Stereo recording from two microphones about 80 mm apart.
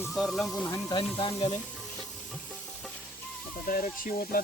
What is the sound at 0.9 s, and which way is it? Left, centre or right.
Speech, left.